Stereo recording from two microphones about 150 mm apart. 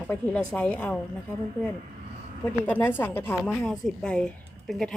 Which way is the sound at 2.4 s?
10° left (ahead or behind).